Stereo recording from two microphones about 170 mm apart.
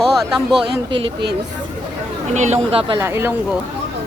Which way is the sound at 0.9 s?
30° right (ahead or behind).